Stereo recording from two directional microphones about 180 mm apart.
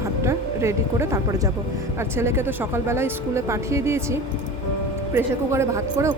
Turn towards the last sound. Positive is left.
turn(degrees=-15)  # may be behind; listen again after turning